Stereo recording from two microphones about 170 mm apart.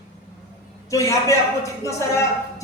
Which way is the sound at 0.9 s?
20° left (ahead or behind).